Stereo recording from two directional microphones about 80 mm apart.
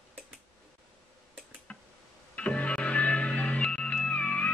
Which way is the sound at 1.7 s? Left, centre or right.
Centre.